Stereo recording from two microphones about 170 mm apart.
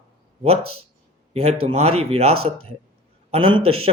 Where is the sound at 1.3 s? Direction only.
40° right (ahead or behind).